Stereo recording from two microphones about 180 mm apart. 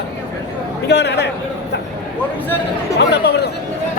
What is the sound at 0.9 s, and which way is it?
Speech, 70° left (ahead or behind).